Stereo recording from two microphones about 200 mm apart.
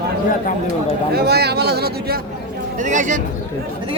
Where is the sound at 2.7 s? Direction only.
40° right (ahead or behind).